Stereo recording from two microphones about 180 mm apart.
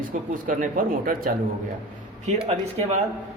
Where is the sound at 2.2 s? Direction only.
35° right (ahead or behind).